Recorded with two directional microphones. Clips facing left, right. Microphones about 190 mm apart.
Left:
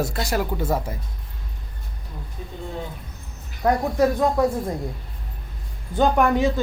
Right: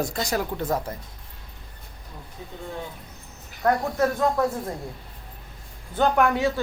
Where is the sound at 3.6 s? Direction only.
15° left (ahead or behind).